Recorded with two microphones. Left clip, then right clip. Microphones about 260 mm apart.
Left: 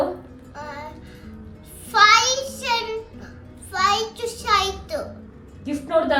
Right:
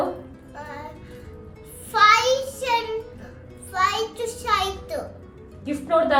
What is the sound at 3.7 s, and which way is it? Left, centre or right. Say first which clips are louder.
A woman's voice: left 2 dB; centre.